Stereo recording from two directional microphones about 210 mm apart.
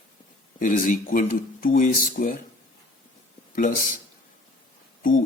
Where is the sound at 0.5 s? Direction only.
40° left (ahead or behind).